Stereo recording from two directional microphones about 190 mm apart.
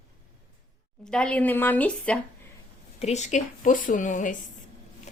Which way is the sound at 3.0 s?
35° left (ahead or behind).